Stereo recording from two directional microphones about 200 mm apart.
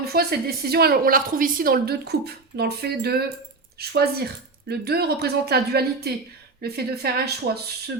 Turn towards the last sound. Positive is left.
turn(degrees=-55)  # may be behind; listen again after turning